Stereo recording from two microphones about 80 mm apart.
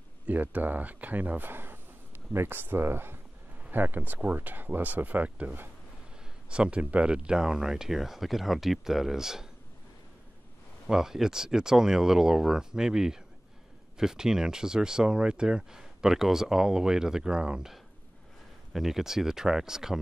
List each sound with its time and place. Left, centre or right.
0.3 s speech: right
10.9 s speech: centre